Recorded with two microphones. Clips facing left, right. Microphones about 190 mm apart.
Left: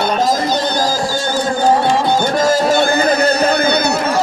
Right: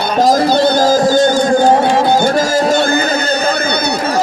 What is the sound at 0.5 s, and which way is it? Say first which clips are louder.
Music: right 6 dB; 50° right (ahead or behind).